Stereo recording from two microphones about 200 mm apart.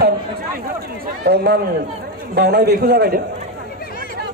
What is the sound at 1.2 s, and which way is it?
A man's voice, 55° right (ahead or behind).